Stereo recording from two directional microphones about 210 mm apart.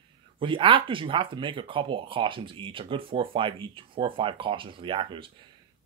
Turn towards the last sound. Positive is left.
turn(degrees=-25)  # may be behind; listen again after turning